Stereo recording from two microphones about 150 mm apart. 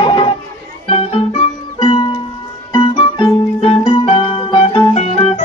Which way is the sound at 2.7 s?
35° left (ahead or behind).